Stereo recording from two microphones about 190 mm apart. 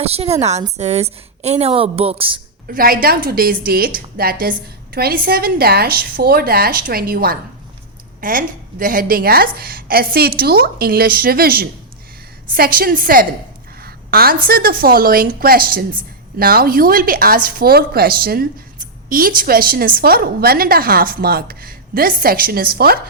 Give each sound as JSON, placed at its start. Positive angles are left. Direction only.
{"t": 0.0, "sound": "a woman's voice", "side_deg": -30}
{"t": 2.6, "sound": "a woman's voice", "side_deg": -50}